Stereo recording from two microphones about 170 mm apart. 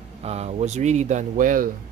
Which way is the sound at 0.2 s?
40° right (ahead or behind).